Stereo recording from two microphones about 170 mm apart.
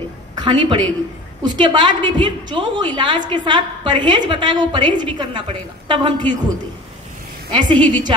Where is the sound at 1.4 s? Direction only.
25° right (ahead or behind).